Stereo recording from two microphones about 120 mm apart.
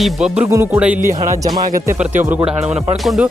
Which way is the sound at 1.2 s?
30° right (ahead or behind).